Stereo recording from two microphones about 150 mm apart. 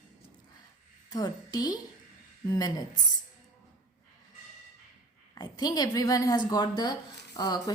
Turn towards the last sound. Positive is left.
turn(degrees=25)  # may be behind; listen again after turning